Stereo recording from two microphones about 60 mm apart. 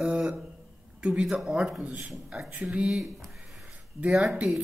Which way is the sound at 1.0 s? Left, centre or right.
Centre.